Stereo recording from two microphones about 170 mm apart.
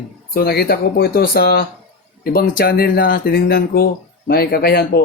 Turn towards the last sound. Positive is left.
turn(degrees=65)  # may be behind; listen again after turning